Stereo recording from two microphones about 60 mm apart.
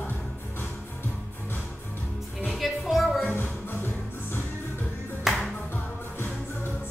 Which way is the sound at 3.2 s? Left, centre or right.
Left.